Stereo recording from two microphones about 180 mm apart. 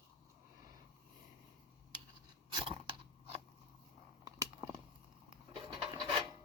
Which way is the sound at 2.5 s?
30° right (ahead or behind).